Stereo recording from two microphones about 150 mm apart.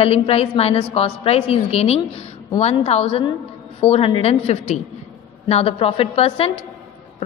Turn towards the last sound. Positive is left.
turn(degrees=40)  # may be behind; listen again after turning